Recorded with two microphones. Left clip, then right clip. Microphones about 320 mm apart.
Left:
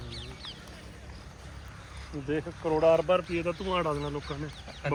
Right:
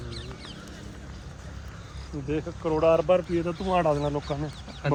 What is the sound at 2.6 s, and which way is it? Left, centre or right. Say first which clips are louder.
Speech: right 2 dB; left.